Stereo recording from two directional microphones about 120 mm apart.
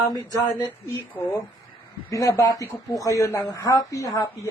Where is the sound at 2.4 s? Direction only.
25° left (ahead or behind).